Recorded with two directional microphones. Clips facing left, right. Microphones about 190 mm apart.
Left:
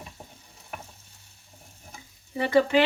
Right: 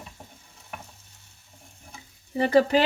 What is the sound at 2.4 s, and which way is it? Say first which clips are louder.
Speech: right 1 dB; 35° right (ahead or behind).